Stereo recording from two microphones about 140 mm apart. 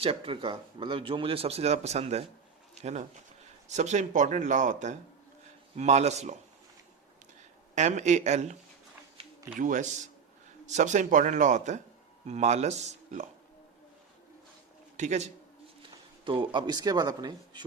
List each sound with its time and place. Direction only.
0.0 s speech: 40° right (ahead or behind)
7.8 s speech: 60° right (ahead or behind)
9.6 s speech: 65° right (ahead or behind)
14.9 s a man's voice: 60° right (ahead or behind)
16.2 s speech: 35° right (ahead or behind)